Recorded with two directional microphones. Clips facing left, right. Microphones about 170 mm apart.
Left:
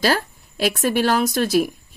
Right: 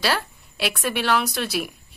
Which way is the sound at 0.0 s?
45° left (ahead or behind).